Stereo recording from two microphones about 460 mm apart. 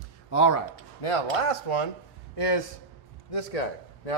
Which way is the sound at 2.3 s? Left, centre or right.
Left.